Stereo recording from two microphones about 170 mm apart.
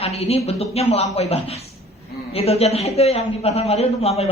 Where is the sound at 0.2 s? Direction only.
35° left (ahead or behind).